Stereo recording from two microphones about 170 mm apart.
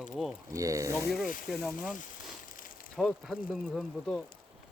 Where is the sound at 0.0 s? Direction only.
Centre (ahead or behind).